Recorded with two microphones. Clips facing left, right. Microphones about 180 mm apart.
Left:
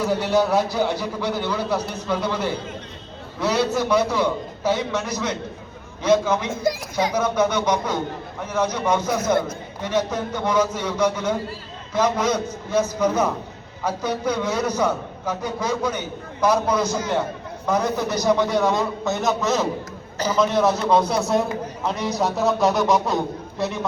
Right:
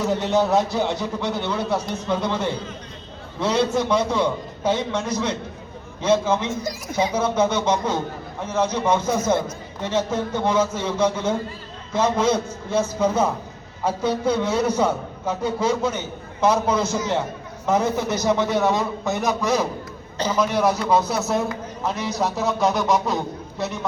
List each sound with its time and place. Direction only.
0.3 s a man's voice: 25° right (ahead or behind)
6.5 s a woman's voice: 60° left (ahead or behind)
7.1 s a man's voice: 25° right (ahead or behind); by 23.8 s centre (ahead or behind)